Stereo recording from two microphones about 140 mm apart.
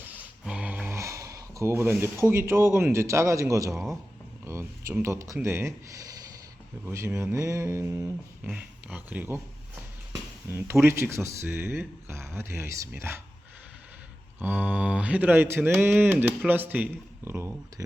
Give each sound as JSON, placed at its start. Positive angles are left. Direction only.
{"t": 0.0, "sound": "a sound", "side_deg": -10}
{"t": 4.4, "sound": "speech", "side_deg": -20}
{"t": 6.8, "sound": "mantra", "side_deg": -20}
{"t": 8.4, "sound": "speech", "side_deg": -10}
{"t": 14.3, "sound": "speech", "side_deg": -15}